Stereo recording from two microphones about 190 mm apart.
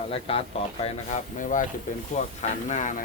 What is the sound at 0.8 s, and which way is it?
Speech, 40° left (ahead or behind).